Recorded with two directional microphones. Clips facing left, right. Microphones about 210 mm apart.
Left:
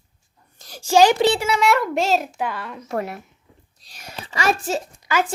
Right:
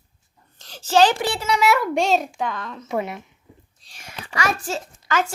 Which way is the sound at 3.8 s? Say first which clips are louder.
Left 3 dB; 40° left (ahead or behind).